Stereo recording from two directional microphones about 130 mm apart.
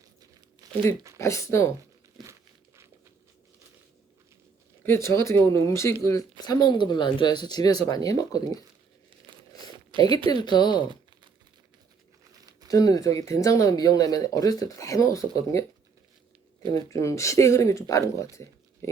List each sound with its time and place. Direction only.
0.6 s crumpling: 30° right (ahead or behind)
1.2 s speech: 20° left (ahead or behind)
2.2 s crumpling: centre (ahead or behind)
4.9 s speech: 20° left (ahead or behind)
9.3 s crumpling: 40° right (ahead or behind)
9.9 s speech: 40° right (ahead or behind)
10.2 s speech: 35° left (ahead or behind)
12.6 s speech: 30° left (ahead or behind)
16.6 s speech: 25° left (ahead or behind)